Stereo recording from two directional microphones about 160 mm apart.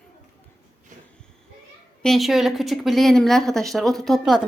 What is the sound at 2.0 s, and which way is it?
Speech, centre (ahead or behind).